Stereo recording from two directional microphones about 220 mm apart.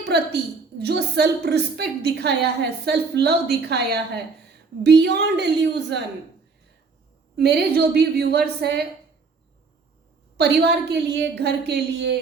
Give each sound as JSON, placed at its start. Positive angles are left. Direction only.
{"t": 0.8, "sound": "a woman's voice", "side_deg": -50}
{"t": 7.3, "sound": "a woman's voice", "side_deg": -45}
{"t": 10.3, "sound": "a woman's voice", "side_deg": -45}